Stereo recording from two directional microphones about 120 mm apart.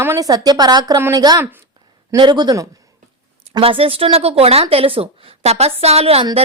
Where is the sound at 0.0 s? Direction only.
20° right (ahead or behind).